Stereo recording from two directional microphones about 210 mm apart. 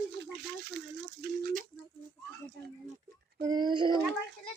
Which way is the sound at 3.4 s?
20° right (ahead or behind).